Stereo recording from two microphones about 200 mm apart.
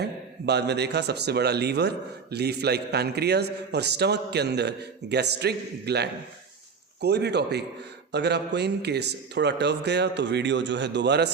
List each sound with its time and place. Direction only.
0.0 s a man's voice: 55° right (ahead or behind)